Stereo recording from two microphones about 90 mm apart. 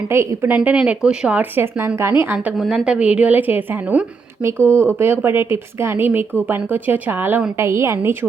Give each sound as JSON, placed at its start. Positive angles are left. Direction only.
{"t": 0.1, "sound": "a woman's voice", "side_deg": -25}
{"t": 2.6, "sound": "a woman's voice", "side_deg": -10}